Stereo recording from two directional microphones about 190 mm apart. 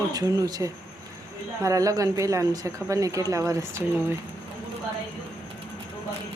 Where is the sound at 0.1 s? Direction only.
20° right (ahead or behind).